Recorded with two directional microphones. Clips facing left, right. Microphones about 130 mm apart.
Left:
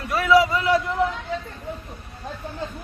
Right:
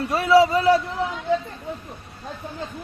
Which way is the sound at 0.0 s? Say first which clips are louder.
Right 2 dB; 30° right (ahead or behind).